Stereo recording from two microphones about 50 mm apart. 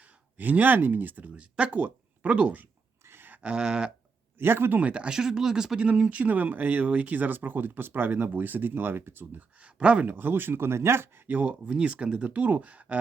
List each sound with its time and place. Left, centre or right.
0.0 s speech: right
1.4 s speech: right
3.0 s a sound: right
3.4 s speech: centre
4.4 s speech: right
4.8 s speech: right
5.1 s speech: centre
6.1 s speech: right
9.6 s speech: right
10.1 s speech: right
11.3 s speech: right